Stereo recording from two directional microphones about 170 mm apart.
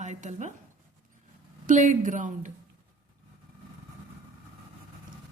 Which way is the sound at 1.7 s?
50° right (ahead or behind).